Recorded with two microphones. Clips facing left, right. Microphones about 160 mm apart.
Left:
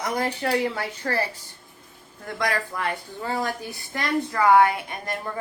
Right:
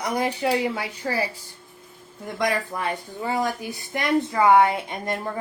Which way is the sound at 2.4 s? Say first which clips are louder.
Right 2 dB; 20° right (ahead or behind).